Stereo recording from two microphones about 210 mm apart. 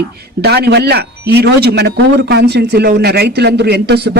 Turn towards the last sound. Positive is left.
turn(degrees=-50)  # may be behind; listen again after turning